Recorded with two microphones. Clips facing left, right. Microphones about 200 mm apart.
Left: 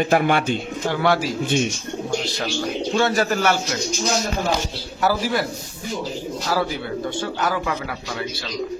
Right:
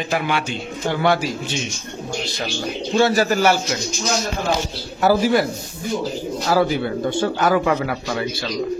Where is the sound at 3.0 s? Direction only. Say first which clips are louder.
Right 4 dB; 10° right (ahead or behind).